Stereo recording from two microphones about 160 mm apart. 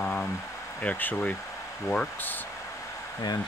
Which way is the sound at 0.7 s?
10° left (ahead or behind).